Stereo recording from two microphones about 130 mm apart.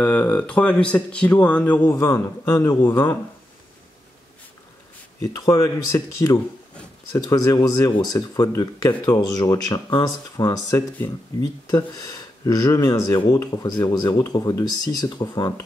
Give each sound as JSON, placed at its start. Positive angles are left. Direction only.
{"t": 0.0, "sound": "speech", "side_deg": 10}
{"t": 5.2, "sound": "speech", "side_deg": 25}